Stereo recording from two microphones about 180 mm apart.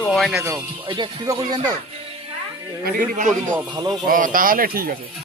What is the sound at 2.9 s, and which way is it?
Speech, 45° right (ahead or behind).